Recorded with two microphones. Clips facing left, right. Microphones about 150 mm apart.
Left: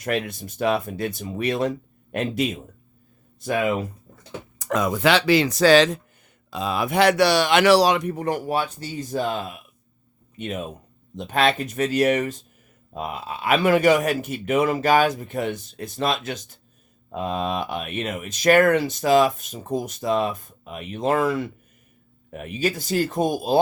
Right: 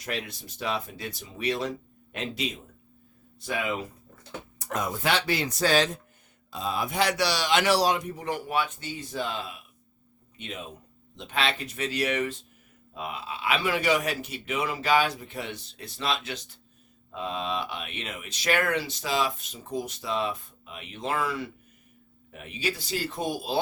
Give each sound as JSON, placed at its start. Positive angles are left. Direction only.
{"t": 0.0, "sound": "speech", "side_deg": 55}
{"t": 4.6, "sound": "speech", "side_deg": 90}
{"t": 6.5, "sound": "a man's voice", "side_deg": 75}